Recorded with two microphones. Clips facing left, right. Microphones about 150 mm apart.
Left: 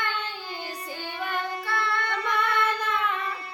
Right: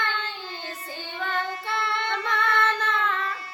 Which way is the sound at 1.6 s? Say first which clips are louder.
Even; 25° right (ahead or behind).